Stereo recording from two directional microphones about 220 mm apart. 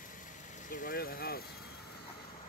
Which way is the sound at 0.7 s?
40° left (ahead or behind).